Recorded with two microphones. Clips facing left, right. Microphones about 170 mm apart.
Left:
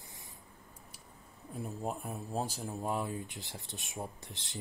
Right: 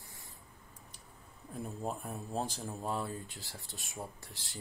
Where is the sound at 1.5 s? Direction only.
Centre (ahead or behind).